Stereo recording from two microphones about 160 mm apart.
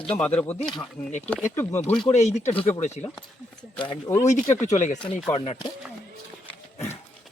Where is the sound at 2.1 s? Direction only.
45° left (ahead or behind).